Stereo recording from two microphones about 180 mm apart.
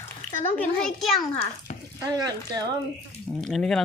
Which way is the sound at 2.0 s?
20° right (ahead or behind).